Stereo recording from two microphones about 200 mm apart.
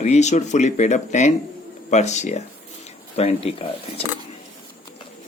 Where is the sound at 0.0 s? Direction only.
35° left (ahead or behind).